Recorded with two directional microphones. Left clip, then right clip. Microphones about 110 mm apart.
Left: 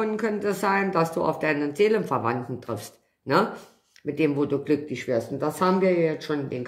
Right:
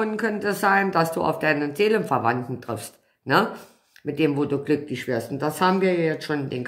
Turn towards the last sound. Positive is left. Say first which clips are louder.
# right 1 dB
turn(degrees=-40)  # may be behind; listen again after turning